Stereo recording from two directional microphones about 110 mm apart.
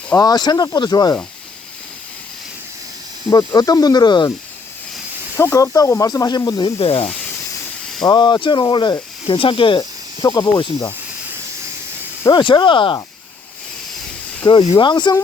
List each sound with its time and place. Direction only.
0.2 s speech: 40° left (ahead or behind)
3.3 s speech: 35° left (ahead or behind)
5.4 s speech: 25° left (ahead or behind)
6.7 s speech: 60° left (ahead or behind)
8.0 s speech: 40° left (ahead or behind)
12.3 s speech: 45° left (ahead or behind)
14.4 s speech: 45° left (ahead or behind)